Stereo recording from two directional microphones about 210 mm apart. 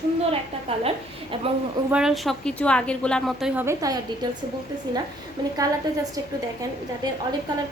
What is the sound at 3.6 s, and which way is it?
Speech, 15° right (ahead or behind).